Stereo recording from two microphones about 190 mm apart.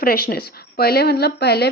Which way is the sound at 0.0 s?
50° left (ahead or behind).